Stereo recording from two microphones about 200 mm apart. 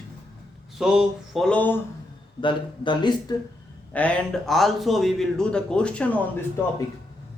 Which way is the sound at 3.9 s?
5° left (ahead or behind).